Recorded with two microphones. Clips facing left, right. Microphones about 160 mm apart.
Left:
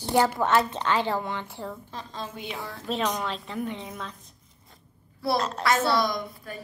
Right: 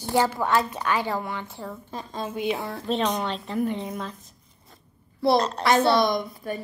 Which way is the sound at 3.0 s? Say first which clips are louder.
Right 1 dB; 25° right (ahead or behind).